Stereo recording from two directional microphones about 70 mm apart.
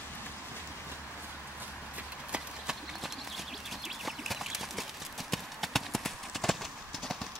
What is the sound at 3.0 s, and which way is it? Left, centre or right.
Clip-clop, centre.